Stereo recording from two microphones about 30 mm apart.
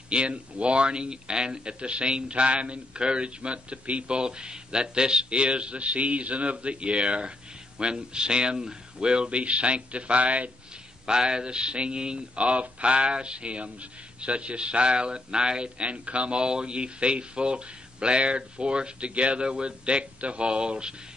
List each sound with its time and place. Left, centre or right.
0.1 s speech: right
4.2 s speech: right
11.1 s speech: right
12.4 s speech: right
15.8 s speech: right